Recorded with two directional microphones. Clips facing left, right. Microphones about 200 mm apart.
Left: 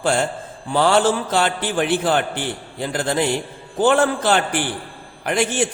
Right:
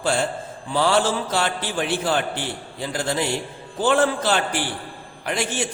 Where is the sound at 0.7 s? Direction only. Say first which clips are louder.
Left 4 dB; 55° left (ahead or behind).